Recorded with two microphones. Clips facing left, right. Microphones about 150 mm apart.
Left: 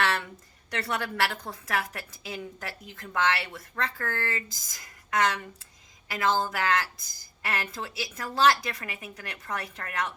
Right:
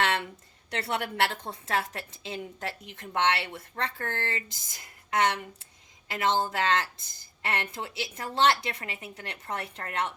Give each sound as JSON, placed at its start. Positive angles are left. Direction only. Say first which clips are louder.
{"t": 0.7, "sound": "a woman's voice", "louder": "even", "side_deg": -25}